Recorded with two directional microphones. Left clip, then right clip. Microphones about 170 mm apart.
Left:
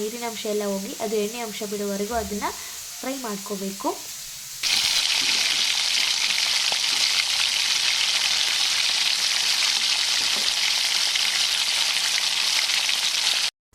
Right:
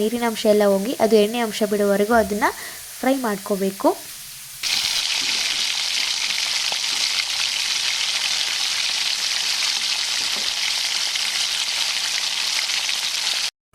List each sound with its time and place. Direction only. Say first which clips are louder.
0.2 s speech: right 10 dB; 40° right (ahead or behind)
3.0 s stir: right 10 dB; 40° right (ahead or behind)
4.6 s water: even; centre (ahead or behind)